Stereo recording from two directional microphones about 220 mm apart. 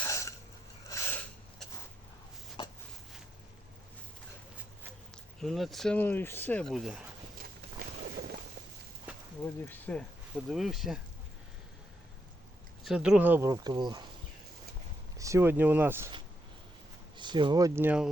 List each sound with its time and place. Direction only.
0.0 s a sound: 15° left (ahead or behind)
2.6 s a sound: 20° left (ahead or behind)
5.1 s speech: centre (ahead or behind)
9.4 s speech: 10° left (ahead or behind)
12.8 s speech: 5° right (ahead or behind); by 14.0 s 20° right (ahead or behind)
15.2 s speech: 10° right (ahead or behind)
17.2 s speech: 20° right (ahead or behind)